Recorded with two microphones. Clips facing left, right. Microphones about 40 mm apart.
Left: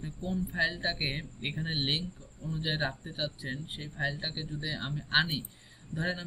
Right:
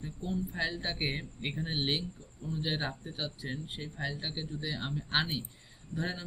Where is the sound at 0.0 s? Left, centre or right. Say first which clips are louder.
Left 1 dB; centre.